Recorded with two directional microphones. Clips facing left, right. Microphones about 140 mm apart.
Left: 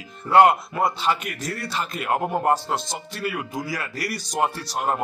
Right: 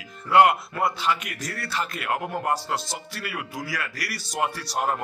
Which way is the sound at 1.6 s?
20° left (ahead or behind).